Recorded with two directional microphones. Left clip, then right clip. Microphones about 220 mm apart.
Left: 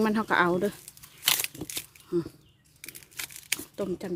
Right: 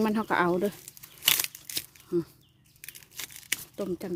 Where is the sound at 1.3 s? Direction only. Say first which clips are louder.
Right 1 dB; 5° right (ahead or behind).